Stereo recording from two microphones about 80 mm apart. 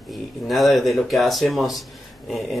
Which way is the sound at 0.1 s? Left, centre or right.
Centre.